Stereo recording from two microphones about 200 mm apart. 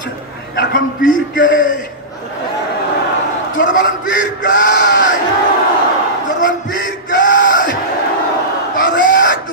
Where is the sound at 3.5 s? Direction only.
65° left (ahead or behind).